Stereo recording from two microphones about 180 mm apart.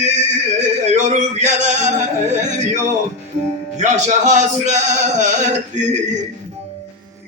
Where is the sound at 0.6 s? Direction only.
40° right (ahead or behind).